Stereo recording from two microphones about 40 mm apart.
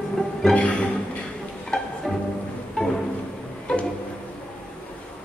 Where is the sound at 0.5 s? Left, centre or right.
Left.